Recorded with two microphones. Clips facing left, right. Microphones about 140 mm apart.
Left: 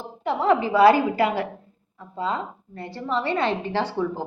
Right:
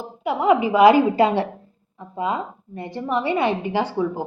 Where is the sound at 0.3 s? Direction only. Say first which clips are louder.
Right 3 dB; 10° right (ahead or behind).